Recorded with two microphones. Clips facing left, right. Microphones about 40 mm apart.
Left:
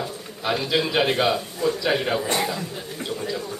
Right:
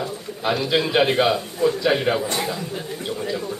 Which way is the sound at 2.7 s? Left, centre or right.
Centre.